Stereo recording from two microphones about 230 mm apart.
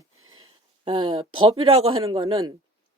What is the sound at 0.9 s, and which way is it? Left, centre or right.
A woman's voice, right.